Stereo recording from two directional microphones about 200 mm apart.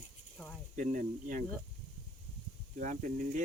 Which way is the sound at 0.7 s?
40° right (ahead or behind).